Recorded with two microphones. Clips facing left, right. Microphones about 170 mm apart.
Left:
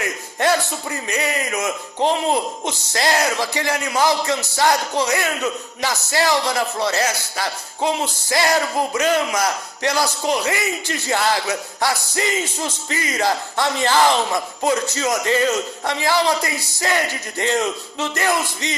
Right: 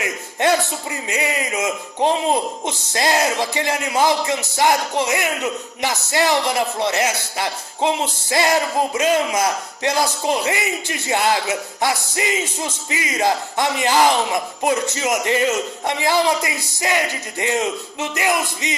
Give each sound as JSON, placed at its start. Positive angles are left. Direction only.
{"t": 0.0, "sound": "a man's voice", "side_deg": -20}